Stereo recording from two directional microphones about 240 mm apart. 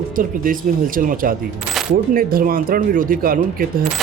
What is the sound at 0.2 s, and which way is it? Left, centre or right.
Speech, right.